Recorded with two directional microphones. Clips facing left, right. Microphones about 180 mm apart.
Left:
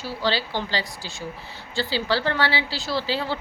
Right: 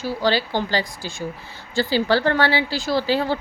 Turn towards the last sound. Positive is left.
turn(degrees=-50)  # may be behind; listen again after turning